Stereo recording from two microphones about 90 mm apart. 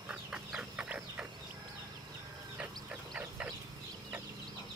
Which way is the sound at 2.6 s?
15° right (ahead or behind).